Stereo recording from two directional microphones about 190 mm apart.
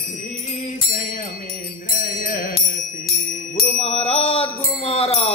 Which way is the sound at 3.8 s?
35° left (ahead or behind).